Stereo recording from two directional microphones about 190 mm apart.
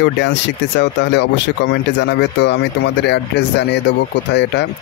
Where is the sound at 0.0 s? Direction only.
65° left (ahead or behind).